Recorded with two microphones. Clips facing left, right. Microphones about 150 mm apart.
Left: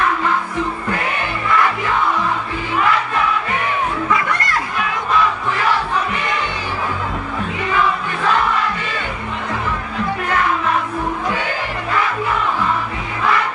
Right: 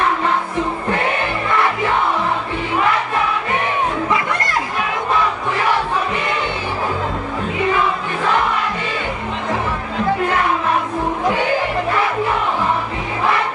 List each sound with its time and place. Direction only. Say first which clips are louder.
0.9 s music: right 3 dB; 30° right (ahead or behind)
4.1 s chatter: even; 25° right (ahead or behind)